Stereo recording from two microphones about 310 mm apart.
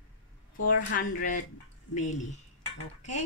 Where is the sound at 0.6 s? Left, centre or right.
Left.